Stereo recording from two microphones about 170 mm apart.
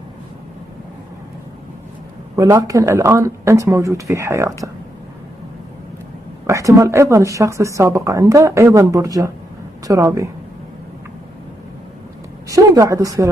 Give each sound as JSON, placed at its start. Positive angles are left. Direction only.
{"t": 2.3, "sound": "speech", "side_deg": -20}
{"t": 6.4, "sound": "a woman's voice", "side_deg": -15}
{"t": 12.4, "sound": "a woman's voice", "side_deg": -20}